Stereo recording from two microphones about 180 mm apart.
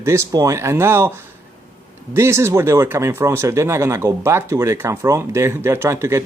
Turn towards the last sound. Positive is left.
turn(degrees=-15)  # may be behind; listen again after turning